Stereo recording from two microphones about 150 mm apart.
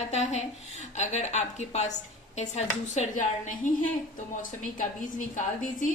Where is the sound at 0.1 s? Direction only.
50° left (ahead or behind).